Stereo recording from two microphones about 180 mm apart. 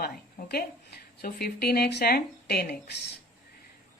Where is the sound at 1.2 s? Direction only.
60° left (ahead or behind).